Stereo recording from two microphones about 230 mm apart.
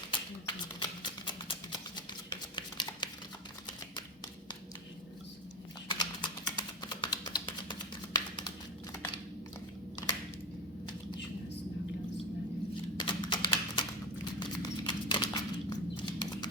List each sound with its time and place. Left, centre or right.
0.1 s music: centre
5.9 s typing: centre
13.0 s a sound: centre